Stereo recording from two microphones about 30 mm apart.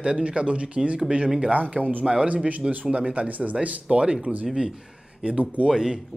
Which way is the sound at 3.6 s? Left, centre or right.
Right.